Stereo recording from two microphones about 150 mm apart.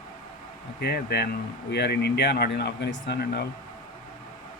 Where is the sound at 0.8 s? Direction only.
90° left.